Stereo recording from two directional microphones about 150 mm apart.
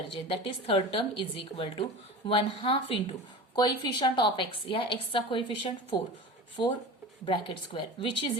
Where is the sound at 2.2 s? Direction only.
35° left (ahead or behind).